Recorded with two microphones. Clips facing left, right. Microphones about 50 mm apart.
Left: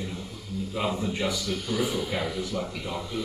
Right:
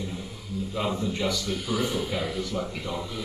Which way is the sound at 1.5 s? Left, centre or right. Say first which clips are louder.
Even; centre.